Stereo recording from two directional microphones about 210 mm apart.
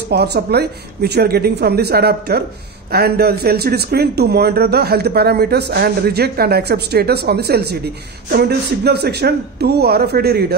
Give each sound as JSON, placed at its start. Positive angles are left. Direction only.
{"t": 0.1, "sound": "speech", "side_deg": -50}